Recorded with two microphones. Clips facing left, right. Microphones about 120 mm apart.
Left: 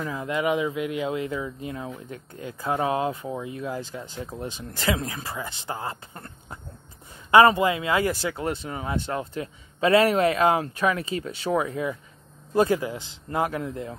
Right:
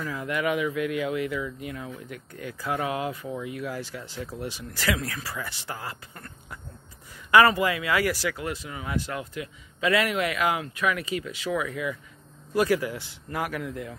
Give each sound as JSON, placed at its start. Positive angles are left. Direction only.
{"t": 0.0, "sound": "speech", "side_deg": 25}